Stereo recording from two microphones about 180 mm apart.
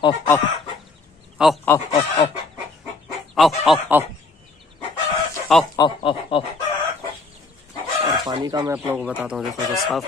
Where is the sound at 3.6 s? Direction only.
Centre (ahead or behind).